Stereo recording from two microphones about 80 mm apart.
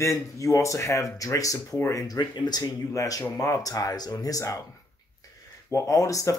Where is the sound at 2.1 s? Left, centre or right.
Left.